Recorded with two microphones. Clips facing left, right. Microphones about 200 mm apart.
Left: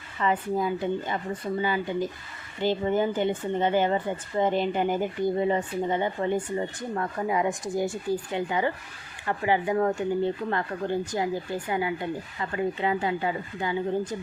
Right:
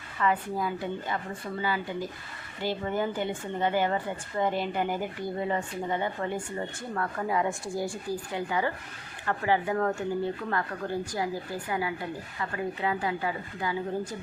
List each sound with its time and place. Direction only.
0.2 s speech: 20° left (ahead or behind)